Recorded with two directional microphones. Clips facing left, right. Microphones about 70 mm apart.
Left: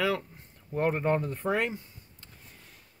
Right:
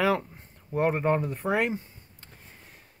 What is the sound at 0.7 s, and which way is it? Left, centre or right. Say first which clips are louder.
Speech: right 2 dB; centre.